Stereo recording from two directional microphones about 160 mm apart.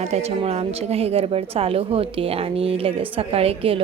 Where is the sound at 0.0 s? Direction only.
40° right (ahead or behind).